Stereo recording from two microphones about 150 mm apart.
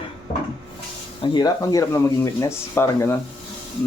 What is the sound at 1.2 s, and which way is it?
Speech, 30° left (ahead or behind).